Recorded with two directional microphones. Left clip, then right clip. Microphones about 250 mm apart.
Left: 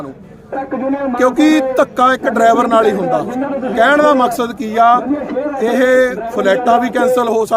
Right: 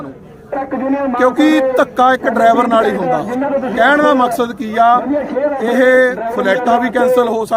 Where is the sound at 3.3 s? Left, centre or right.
Right.